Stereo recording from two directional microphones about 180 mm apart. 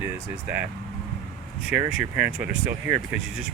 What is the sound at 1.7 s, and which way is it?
Speech, 10° right (ahead or behind).